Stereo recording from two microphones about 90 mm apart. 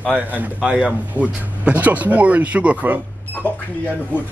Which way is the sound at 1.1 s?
20° right (ahead or behind).